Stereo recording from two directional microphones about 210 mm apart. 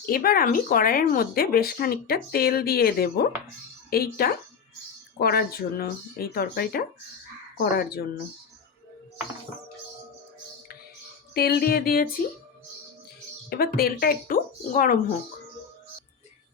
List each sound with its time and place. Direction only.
0.0 s speech: 45° left (ahead or behind)
11.3 s speech: 50° left (ahead or behind)
13.5 s speech: 45° left (ahead or behind)